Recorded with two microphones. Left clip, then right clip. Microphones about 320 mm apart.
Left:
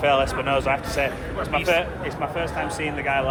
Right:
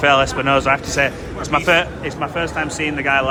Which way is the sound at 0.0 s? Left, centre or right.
Right.